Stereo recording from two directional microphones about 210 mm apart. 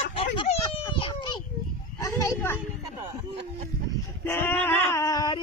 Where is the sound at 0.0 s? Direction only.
30° left (ahead or behind); by 2.6 s 10° left (ahead or behind).